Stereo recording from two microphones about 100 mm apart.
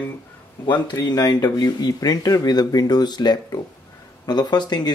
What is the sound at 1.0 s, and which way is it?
Speech, 40° left (ahead or behind).